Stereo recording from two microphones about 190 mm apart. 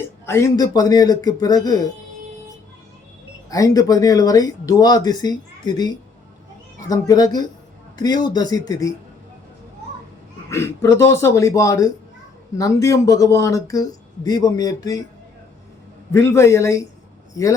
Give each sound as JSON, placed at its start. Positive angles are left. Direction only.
{"t": 0.3, "sound": "speech", "side_deg": 15}
{"t": 3.5, "sound": "speech", "side_deg": 20}
{"t": 10.5, "sound": "speech", "side_deg": 15}
{"t": 16.1, "sound": "speech", "side_deg": 15}